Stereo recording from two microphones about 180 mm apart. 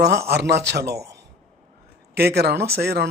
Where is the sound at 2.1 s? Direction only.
60° right (ahead or behind).